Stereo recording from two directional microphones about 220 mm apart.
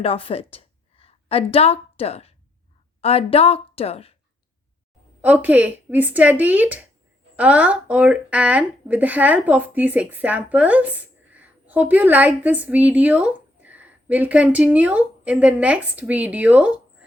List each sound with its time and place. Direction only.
0.0 s a woman's voice: 25° left (ahead or behind)
5.2 s speech: 5° right (ahead or behind)